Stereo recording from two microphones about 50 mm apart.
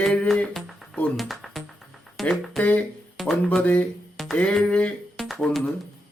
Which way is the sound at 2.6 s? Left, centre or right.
Left.